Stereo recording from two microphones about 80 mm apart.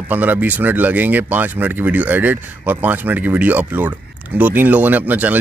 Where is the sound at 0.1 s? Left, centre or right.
Right.